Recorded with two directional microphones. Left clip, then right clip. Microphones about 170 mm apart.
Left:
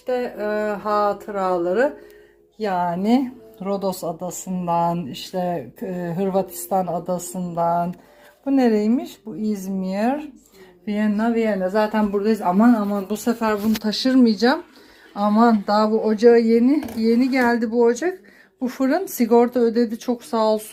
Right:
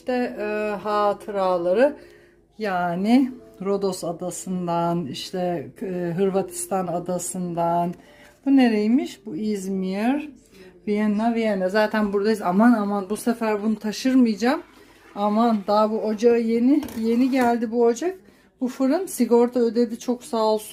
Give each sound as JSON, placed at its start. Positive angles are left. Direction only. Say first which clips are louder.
{"t": 0.0, "sound": "speech", "louder": "left 2 dB", "side_deg": -10}
{"t": 11.2, "sound": "speech", "louder": "left 4 dB", "side_deg": -25}
{"t": 11.9, "sound": "speech", "louder": "left 1 dB", "side_deg": -10}